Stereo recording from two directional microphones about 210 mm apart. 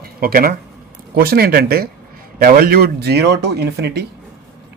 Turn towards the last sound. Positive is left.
turn(degrees=-50)  # may be behind; listen again after turning